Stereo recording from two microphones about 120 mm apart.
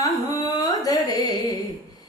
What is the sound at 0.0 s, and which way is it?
Carnatic music, 30° left (ahead or behind).